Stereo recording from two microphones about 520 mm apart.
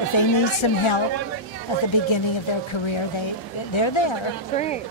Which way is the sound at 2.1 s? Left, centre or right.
Left.